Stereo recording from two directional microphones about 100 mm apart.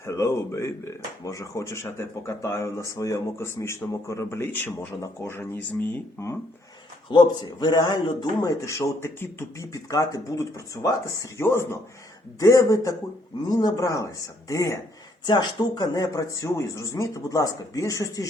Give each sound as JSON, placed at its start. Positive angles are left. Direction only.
{"t": 0.0, "sound": "speech", "side_deg": 30}
{"t": 7.1, "sound": "a man's voice", "side_deg": 50}
{"t": 9.7, "sound": "speech", "side_deg": 35}
{"t": 15.3, "sound": "speech", "side_deg": 45}